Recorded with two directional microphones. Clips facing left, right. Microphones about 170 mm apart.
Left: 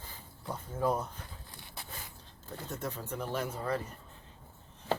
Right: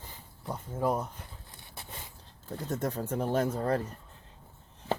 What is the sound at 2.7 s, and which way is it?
Speech, 45° right (ahead or behind).